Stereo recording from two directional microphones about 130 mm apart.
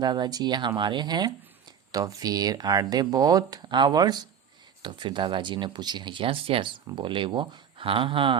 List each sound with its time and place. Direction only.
0.0 s speech: 35° right (ahead or behind)